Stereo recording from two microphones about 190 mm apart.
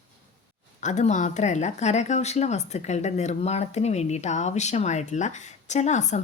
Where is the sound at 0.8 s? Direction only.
40° left (ahead or behind).